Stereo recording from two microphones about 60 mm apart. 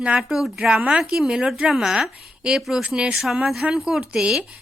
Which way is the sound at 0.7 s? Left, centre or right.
Centre.